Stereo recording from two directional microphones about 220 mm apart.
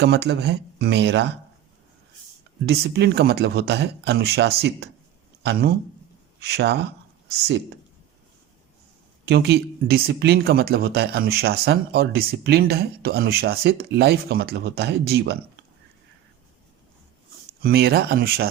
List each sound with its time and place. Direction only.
0.0 s speech: 50° right (ahead or behind)
2.6 s a man's voice: 50° right (ahead or behind)
9.2 s speech: 50° right (ahead or behind)
17.6 s speech: 45° right (ahead or behind)